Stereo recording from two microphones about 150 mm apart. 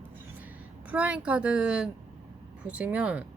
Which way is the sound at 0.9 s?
10° right (ahead or behind).